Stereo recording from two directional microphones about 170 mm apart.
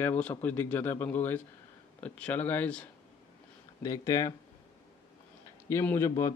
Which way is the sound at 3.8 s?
20° left (ahead or behind).